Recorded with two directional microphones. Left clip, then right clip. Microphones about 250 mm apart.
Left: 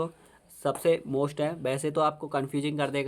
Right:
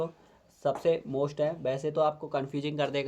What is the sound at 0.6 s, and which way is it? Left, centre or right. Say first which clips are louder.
Speech: left 2 dB; left.